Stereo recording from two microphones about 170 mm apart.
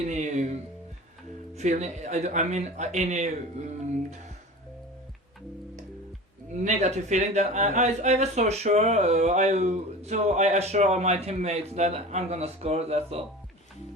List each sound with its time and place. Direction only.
0.1 s music: 45° right (ahead or behind)
1.5 s speech: 45° right (ahead or behind)
6.7 s speech: 40° right (ahead or behind)